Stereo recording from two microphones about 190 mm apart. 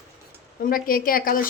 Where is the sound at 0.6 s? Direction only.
50° left (ahead or behind).